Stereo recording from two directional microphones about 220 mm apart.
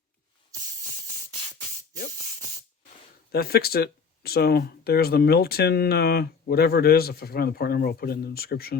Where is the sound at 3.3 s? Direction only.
45° left (ahead or behind).